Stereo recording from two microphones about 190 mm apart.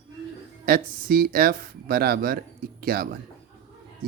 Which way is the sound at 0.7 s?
50° right (ahead or behind).